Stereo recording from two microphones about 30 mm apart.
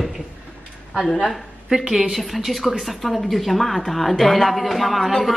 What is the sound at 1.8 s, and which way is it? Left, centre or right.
Speech, centre.